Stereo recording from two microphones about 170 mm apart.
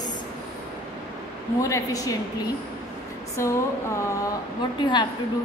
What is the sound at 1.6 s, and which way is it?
A woman's voice, 20° left (ahead or behind).